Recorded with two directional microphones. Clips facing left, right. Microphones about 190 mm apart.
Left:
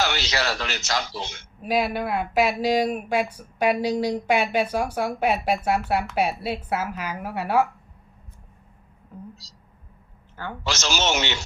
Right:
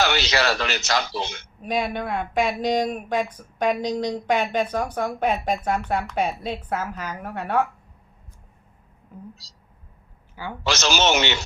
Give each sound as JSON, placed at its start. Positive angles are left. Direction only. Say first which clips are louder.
{"t": 0.0, "sound": "a man's voice", "louder": "right 4 dB", "side_deg": -65}
{"t": 1.6, "sound": "speech", "louder": "left 2 dB", "side_deg": 5}
{"t": 9.1, "sound": "speech", "louder": "left 1 dB", "side_deg": -5}
{"t": 10.6, "sound": "a man's voice", "louder": "right 4 dB", "side_deg": -70}